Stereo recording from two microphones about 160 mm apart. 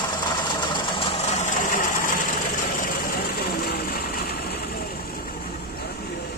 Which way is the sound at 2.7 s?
60° left (ahead or behind).